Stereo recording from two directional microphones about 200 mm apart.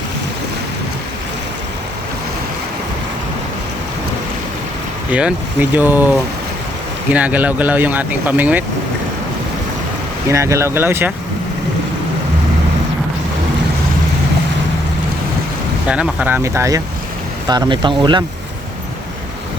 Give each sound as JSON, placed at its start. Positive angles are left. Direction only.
{"t": 5.1, "sound": "speech", "side_deg": -5}
{"t": 10.2, "sound": "speech", "side_deg": -15}
{"t": 15.9, "sound": "speech", "side_deg": -5}